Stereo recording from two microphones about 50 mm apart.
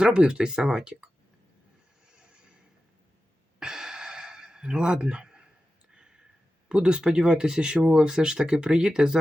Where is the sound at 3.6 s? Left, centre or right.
Centre.